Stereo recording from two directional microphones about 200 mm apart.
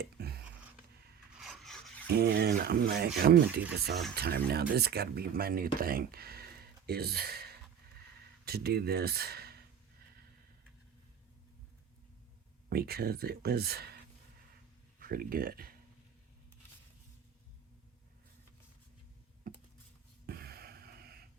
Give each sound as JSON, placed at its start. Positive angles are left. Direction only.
{"t": 0.0, "sound": "a sound", "side_deg": -50}
{"t": 1.4, "sound": "rub", "side_deg": 0}
{"t": 2.0, "sound": "speech", "side_deg": -50}
{"t": 12.6, "sound": "speech", "side_deg": -50}
{"t": 19.5, "sound": "computer keyboard", "side_deg": -45}
{"t": 20.2, "sound": "a sound", "side_deg": -50}